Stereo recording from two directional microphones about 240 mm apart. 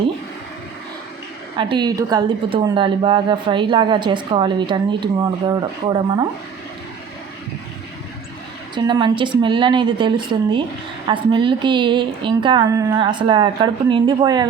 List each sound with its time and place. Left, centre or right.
1.5 s a woman's voice: centre
8.7 s a woman's voice: centre